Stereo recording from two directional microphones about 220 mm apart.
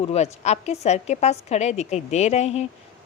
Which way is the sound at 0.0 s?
30° left (ahead or behind).